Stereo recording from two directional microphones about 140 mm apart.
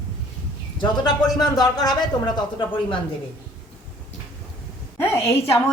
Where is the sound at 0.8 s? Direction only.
30° left (ahead or behind).